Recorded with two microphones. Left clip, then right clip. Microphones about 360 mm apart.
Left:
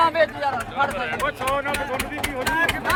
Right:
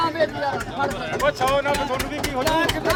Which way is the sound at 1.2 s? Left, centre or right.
Right.